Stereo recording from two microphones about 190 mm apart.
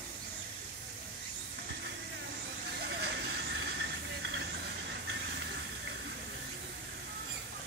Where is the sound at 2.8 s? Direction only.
60° right (ahead or behind).